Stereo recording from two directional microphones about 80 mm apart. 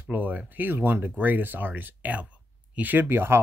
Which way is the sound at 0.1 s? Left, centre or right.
Right.